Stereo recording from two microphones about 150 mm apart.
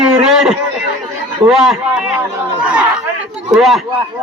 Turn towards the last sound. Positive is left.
turn(degrees=0)  # may be behind; listen again after turning